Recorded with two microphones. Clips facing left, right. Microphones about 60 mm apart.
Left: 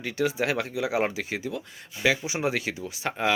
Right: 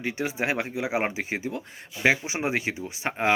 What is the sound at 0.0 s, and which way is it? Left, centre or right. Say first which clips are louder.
Speech: left 2 dB; right.